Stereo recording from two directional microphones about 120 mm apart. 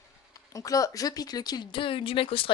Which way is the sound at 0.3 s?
30° left (ahead or behind).